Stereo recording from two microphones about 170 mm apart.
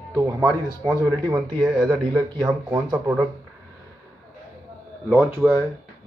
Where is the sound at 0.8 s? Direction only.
30° right (ahead or behind).